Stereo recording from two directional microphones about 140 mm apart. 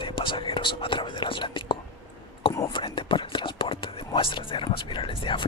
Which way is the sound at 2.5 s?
20° left (ahead or behind).